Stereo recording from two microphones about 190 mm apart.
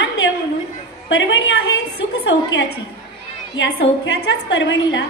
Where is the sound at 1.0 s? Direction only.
75° left (ahead or behind).